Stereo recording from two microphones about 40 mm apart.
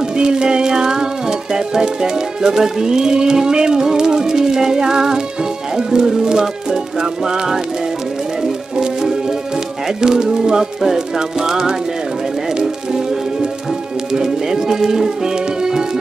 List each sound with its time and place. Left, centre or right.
0.2 s music: right
1.5 s speech: centre
10.0 s speech: centre
12.5 s music: centre
14.1 s speech: centre